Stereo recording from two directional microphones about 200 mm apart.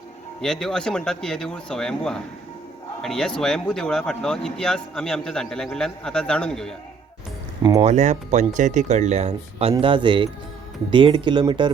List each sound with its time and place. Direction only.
0.4 s speech: 5° left (ahead or behind)
7.8 s speech: 35° right (ahead or behind)